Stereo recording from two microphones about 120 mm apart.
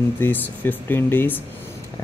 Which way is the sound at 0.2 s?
15° left (ahead or behind).